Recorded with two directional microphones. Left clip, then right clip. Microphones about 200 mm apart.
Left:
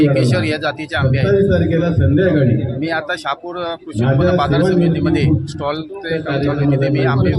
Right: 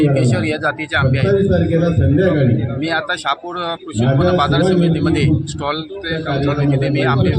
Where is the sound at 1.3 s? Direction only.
25° right (ahead or behind).